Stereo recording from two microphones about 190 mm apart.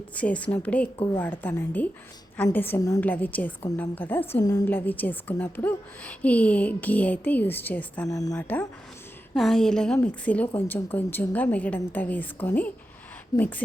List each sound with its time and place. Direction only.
0.1 s a woman's voice: 5° left (ahead or behind)
8.1 s speech: 20° left (ahead or behind)
8.4 s a woman's voice: 10° left (ahead or behind)